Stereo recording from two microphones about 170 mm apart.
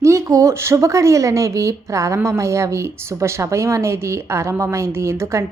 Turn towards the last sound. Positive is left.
turn(degrees=-15)  # may be behind; listen again after turning